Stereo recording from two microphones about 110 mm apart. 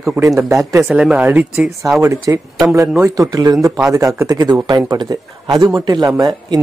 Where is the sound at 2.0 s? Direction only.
25° right (ahead or behind).